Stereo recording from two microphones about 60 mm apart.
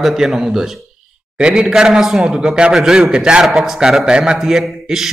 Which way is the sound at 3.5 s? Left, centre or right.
Centre.